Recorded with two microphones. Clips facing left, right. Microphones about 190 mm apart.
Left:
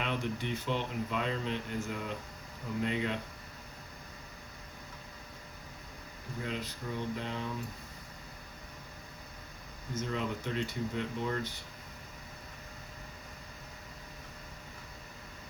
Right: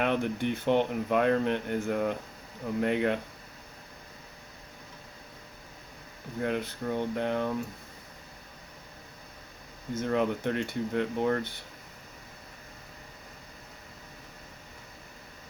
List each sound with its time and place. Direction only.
0.0 s speech: 60° right (ahead or behind)
6.4 s speech: 55° right (ahead or behind)
10.0 s speech: 60° right (ahead or behind)